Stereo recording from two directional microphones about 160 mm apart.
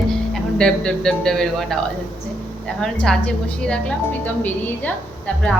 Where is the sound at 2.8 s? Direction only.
Centre (ahead or behind).